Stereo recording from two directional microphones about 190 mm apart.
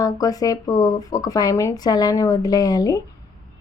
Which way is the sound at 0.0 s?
20° left (ahead or behind).